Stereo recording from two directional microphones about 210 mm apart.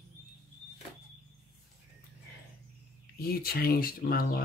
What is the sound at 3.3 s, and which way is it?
Speech, 45° left (ahead or behind).